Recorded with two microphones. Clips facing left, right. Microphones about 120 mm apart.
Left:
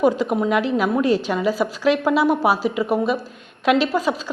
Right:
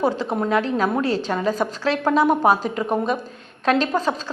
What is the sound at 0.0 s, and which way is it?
A woman's voice, 15° left (ahead or behind).